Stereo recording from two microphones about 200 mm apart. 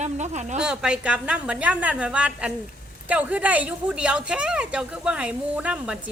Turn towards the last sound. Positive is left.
turn(degrees=-5)  # may be behind; listen again after turning